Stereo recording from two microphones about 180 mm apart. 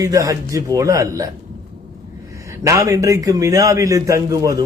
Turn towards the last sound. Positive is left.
turn(degrees=-20)  # may be behind; listen again after turning